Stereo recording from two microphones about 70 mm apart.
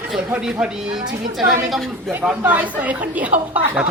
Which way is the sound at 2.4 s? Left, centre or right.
Right.